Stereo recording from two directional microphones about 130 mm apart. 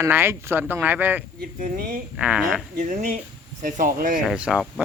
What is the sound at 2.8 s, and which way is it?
Speech, 65° right (ahead or behind).